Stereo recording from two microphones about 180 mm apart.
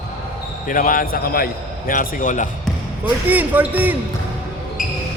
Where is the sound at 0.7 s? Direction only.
50° left (ahead or behind).